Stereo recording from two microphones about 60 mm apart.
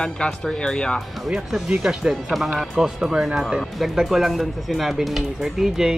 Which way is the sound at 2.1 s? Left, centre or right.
Centre.